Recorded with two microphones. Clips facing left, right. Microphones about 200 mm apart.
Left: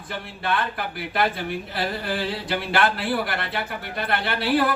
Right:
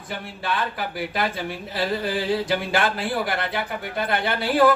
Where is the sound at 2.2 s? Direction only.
50° right (ahead or behind).